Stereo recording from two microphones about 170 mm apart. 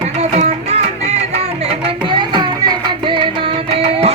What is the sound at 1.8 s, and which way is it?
Music, 25° right (ahead or behind).